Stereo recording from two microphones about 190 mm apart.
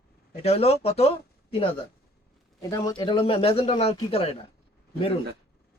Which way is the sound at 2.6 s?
20° left (ahead or behind).